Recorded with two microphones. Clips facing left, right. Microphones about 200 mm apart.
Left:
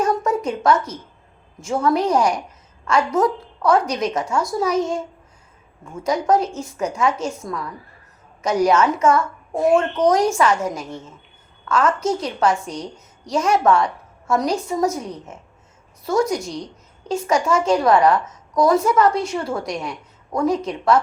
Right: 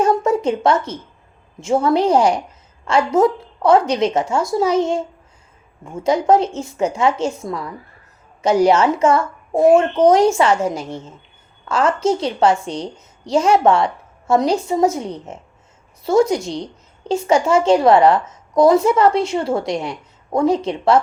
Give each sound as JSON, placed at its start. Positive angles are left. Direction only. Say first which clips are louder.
{"t": 0.0, "sound": "a woman's voice", "louder": "right 4 dB", "side_deg": -25}